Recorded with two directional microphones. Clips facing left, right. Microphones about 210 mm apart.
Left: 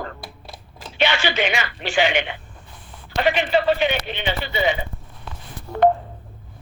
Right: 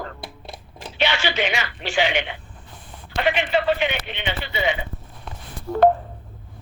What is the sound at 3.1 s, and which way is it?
Speech, 35° left (ahead or behind).